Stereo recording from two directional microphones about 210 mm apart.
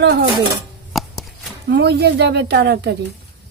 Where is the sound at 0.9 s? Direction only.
Centre (ahead or behind).